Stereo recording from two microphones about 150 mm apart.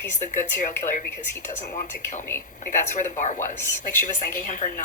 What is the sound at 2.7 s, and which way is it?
Speech, 55° left (ahead or behind).